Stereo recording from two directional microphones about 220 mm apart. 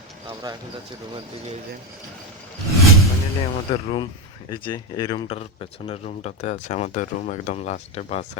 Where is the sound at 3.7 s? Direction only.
25° left (ahead or behind).